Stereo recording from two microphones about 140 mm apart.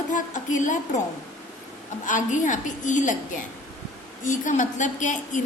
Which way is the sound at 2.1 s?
65° left (ahead or behind).